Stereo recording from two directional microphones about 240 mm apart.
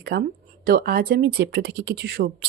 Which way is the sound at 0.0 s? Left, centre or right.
Right.